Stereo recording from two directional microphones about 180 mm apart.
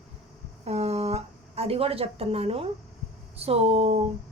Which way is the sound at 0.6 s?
35° right (ahead or behind).